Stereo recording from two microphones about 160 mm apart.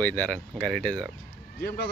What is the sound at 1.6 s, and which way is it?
Speech, 90° left.